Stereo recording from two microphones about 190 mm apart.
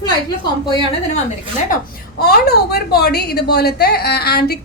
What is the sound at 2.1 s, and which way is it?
A woman's voice, 55° left (ahead or behind).